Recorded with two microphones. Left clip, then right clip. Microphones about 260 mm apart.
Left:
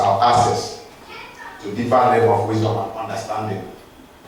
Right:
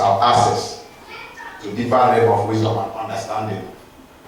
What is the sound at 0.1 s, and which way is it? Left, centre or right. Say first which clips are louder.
Speech: right 1 dB; centre.